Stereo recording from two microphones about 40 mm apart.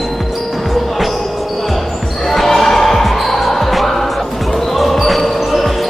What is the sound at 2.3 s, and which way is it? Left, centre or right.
Basketball bounce, centre.